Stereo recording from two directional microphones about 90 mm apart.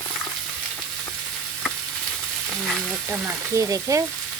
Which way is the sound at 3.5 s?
40° right (ahead or behind).